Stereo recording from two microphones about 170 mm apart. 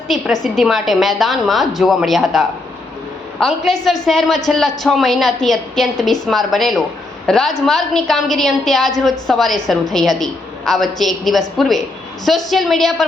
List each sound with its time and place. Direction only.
0.1 s a woman's voice: centre (ahead or behind)
3.4 s a woman's voice: centre (ahead or behind)